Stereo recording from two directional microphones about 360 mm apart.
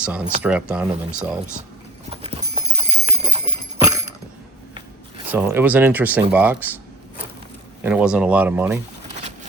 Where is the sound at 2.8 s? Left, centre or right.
Centre.